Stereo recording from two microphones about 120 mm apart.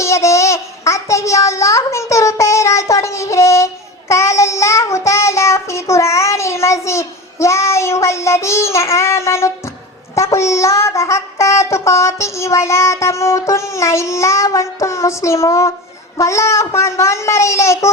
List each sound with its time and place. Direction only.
0.0 s child singing: 25° left (ahead or behind)